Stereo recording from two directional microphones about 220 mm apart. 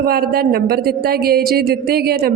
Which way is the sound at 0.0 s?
45° right (ahead or behind).